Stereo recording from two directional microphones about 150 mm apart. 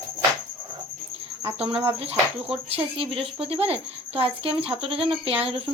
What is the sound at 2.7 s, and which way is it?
Speech, 40° right (ahead or behind).